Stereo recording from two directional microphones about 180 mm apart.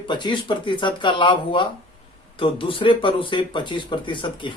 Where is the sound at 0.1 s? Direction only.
25° left (ahead or behind).